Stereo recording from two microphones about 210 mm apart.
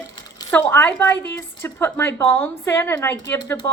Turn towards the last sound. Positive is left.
turn(degrees=10)  # may be behind; listen again after turning